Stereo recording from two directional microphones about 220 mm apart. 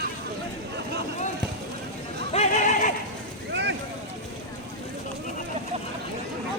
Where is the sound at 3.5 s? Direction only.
50° right (ahead or behind).